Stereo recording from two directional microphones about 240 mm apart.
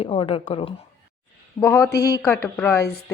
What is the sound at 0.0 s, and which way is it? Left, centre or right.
Speech, left.